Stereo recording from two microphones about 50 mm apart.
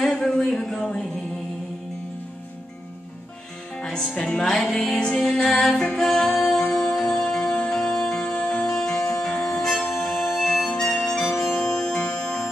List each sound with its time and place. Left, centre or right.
0.0 s a sound: centre
3.7 s music: centre
4.5 s music: centre
6.7 s music: left
7.0 s music: centre
9.4 s harmonica: centre
11.6 s music: centre